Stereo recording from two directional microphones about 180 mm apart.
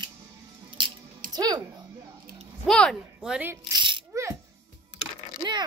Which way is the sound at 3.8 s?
25° right (ahead or behind).